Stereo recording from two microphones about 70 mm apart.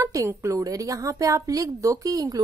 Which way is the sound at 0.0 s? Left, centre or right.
Right.